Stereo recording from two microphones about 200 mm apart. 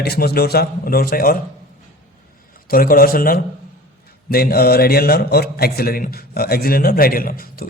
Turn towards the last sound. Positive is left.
turn(degrees=45)  # may be behind; listen again after turning